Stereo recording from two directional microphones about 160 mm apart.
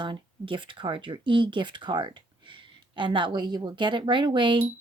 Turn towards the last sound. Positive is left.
turn(degrees=-30)  # may be behind; listen again after turning